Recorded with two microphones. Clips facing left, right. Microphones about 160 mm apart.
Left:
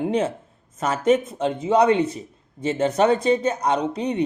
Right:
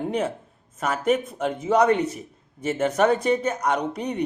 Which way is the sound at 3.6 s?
25° left (ahead or behind).